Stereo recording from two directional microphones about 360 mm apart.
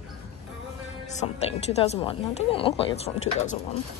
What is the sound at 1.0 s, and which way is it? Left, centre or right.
A woman's voice, centre.